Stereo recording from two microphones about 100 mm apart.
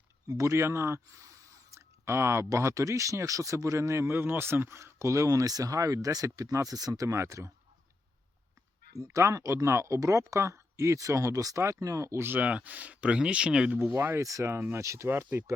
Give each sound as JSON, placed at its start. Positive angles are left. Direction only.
{"t": 0.3, "sound": "speech", "side_deg": -30}
{"t": 9.0, "sound": "speech", "side_deg": -35}
{"t": 13.9, "sound": "speech", "side_deg": -25}